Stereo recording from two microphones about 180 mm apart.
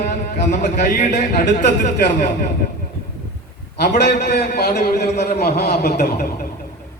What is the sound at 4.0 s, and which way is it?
A man's voice, 65° left (ahead or behind).